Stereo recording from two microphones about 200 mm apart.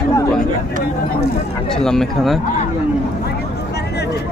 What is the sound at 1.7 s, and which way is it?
Speech, centre (ahead or behind).